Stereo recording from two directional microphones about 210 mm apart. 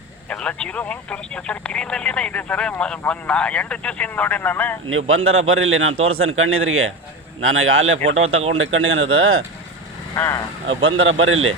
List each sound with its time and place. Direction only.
0.3 s speech: 5° left (ahead or behind)
4.9 s a man's voice: 75° right (ahead or behind)
7.4 s speech: 75° right (ahead or behind)
10.2 s speech: 10° left (ahead or behind)
10.7 s speech: 70° right (ahead or behind)